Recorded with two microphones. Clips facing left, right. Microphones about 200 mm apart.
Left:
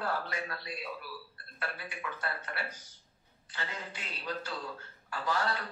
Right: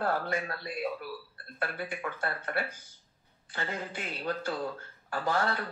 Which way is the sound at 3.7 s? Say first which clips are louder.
Right 7 dB; 50° right (ahead or behind).